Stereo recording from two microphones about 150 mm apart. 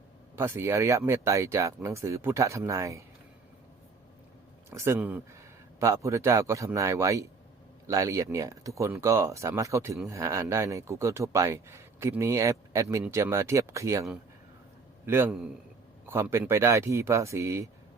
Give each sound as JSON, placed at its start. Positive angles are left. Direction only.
{"t": 0.3, "sound": "speech", "side_deg": -15}
{"t": 4.7, "sound": "speech", "side_deg": -20}